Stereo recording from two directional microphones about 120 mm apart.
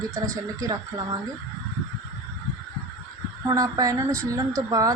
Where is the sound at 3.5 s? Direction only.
30° right (ahead or behind).